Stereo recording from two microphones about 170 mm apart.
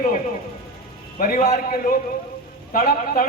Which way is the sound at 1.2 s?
55° left (ahead or behind).